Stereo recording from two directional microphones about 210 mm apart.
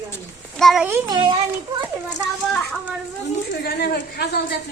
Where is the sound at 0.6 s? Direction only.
Centre (ahead or behind).